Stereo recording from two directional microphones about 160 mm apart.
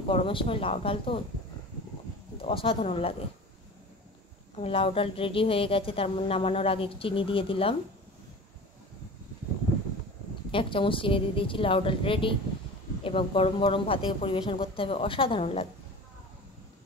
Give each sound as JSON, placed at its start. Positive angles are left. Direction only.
{"t": 0.1, "sound": "speech", "side_deg": 35}
{"t": 2.3, "sound": "speech", "side_deg": 35}
{"t": 4.6, "sound": "speech", "side_deg": 35}
{"t": 10.5, "sound": "speech", "side_deg": 35}